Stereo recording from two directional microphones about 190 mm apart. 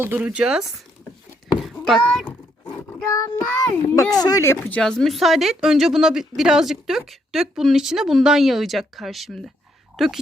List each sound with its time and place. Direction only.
0.0 s speech: 10° right (ahead or behind)
1.6 s a sound: centre (ahead or behind)
2.0 s a woman's voice: 5° left (ahead or behind)
3.1 s child singing: 15° left (ahead or behind)
4.1 s a woman's voice: 20° left (ahead or behind); by 10.1 s centre (ahead or behind)